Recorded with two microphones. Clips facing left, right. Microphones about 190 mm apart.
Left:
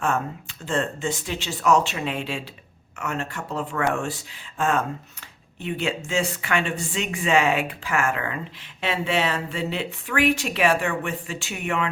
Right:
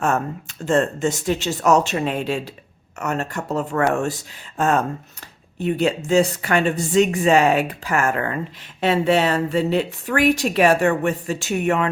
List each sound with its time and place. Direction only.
0.0 s a woman's voice: 45° right (ahead or behind)